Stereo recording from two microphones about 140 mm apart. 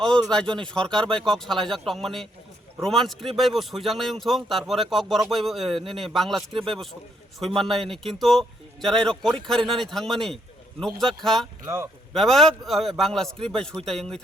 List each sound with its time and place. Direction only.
0.0 s speech: 5° left (ahead or behind)
11.6 s speech: 20° right (ahead or behind)
12.1 s speech: 5° left (ahead or behind)